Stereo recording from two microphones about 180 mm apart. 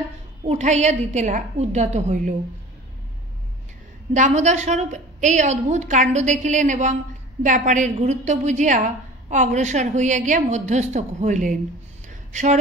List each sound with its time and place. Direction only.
0.5 s a woman's voice: 40° right (ahead or behind)
4.1 s a woman's voice: 40° right (ahead or behind)
12.1 s a sound: 40° right (ahead or behind)